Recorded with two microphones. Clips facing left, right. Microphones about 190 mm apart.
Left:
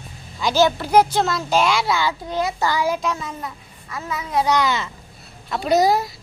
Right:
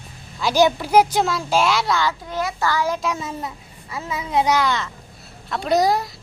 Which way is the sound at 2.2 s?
30° left (ahead or behind).